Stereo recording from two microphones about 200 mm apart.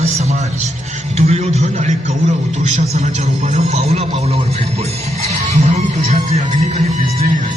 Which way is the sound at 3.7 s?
30° right (ahead or behind).